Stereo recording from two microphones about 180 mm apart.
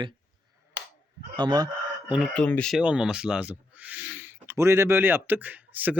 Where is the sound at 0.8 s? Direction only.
75° right (ahead or behind).